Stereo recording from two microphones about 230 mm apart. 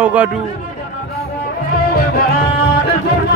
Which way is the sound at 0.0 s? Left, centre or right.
Centre.